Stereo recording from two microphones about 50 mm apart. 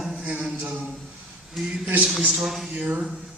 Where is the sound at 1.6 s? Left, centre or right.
Centre.